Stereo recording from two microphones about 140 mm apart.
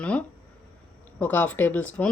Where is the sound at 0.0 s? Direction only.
10° left (ahead or behind).